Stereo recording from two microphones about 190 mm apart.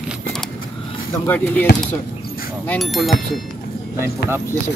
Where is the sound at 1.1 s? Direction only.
10° left (ahead or behind).